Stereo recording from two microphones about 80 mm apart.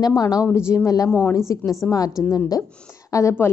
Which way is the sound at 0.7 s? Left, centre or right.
Left.